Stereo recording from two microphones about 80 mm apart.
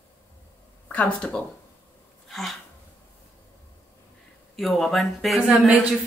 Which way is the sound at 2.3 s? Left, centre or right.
Centre.